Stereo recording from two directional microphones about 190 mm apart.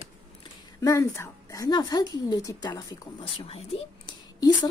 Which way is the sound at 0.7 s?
15° left (ahead or behind).